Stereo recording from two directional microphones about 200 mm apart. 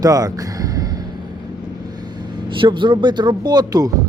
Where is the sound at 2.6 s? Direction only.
25° right (ahead or behind).